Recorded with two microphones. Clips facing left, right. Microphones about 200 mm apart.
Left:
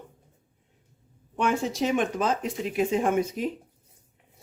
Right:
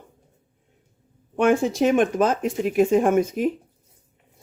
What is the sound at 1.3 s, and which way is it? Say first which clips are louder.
Speech: right 7 dB; 50° right (ahead or behind).